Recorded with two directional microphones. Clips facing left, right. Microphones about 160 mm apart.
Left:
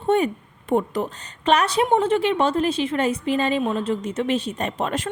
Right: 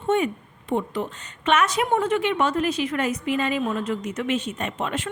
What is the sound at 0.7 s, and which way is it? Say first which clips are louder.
Speech: left 4 dB; 45° left (ahead or behind).